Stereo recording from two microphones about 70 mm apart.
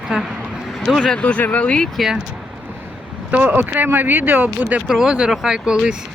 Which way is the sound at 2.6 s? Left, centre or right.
Centre.